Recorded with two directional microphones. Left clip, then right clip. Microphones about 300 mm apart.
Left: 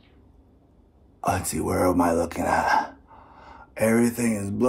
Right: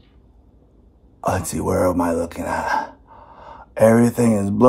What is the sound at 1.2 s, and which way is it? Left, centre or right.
Speech, centre.